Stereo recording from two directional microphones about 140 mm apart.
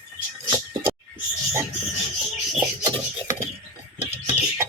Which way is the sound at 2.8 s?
25° right (ahead or behind).